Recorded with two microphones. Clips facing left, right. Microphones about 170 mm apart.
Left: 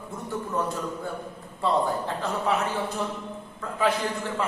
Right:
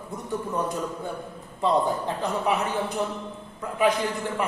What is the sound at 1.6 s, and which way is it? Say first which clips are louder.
Speech: right 2 dB; 15° right (ahead or behind).